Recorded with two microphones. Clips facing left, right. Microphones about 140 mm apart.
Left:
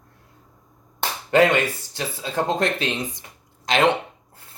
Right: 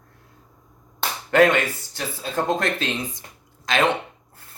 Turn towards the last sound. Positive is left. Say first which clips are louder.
# left 2 dB
turn(degrees=20)  # may be behind; listen again after turning